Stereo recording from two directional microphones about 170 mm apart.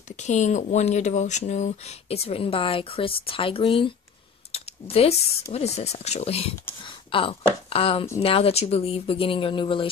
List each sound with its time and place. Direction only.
0.1 s speech: 45° left (ahead or behind)